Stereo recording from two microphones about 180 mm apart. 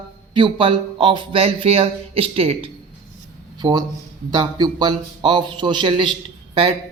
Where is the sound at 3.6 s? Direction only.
20° right (ahead or behind).